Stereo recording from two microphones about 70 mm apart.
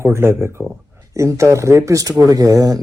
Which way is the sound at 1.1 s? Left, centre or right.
Right.